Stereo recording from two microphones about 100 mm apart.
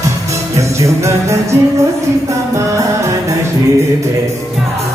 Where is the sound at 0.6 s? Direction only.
30° right (ahead or behind).